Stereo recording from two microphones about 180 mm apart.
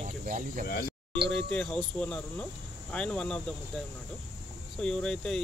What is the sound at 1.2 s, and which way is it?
Speech, 5° left (ahead or behind).